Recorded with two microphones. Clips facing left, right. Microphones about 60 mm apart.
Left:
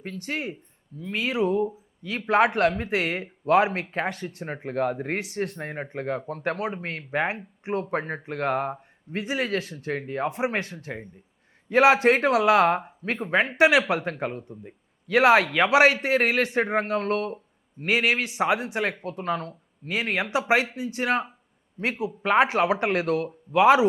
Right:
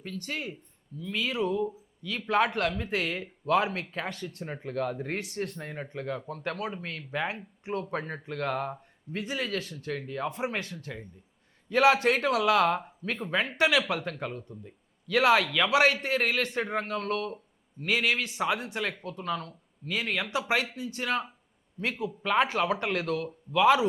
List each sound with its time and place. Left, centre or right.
0.0 s speech: left
6.6 s speech: left
6.8 s speech: left